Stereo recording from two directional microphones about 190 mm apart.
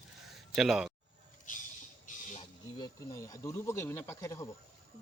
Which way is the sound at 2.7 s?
20° left (ahead or behind).